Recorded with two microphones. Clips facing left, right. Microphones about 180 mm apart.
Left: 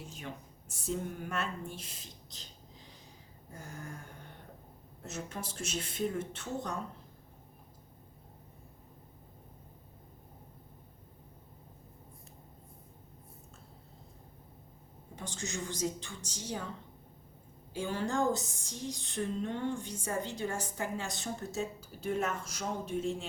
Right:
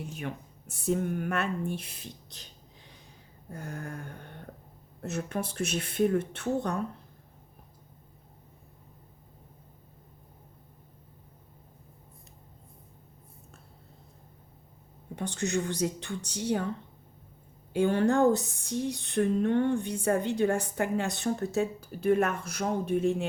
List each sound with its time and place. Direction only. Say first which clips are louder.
0.0 s speech: right 7 dB; 60° right (ahead or behind)
15.1 s speech: right 10 dB; 60° right (ahead or behind)
17.7 s speech: right 9 dB; 60° right (ahead or behind)